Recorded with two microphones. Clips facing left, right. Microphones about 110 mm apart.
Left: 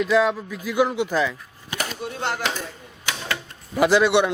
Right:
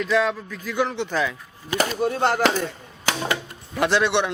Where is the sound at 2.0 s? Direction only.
50° right (ahead or behind).